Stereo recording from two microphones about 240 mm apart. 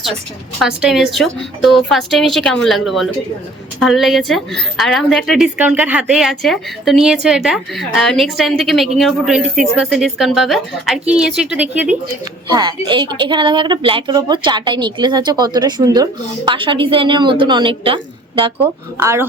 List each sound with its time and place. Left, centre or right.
0.6 s a woman's voice: centre
12.5 s a woman's voice: centre
18.9 s speech: centre